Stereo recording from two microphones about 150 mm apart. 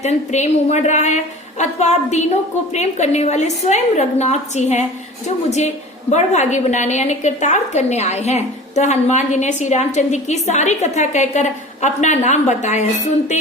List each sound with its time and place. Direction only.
0.0 s a woman's voice: 50° left (ahead or behind)